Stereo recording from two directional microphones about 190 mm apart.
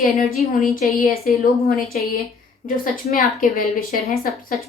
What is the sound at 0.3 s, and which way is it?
A woman's voice, 45° left (ahead or behind).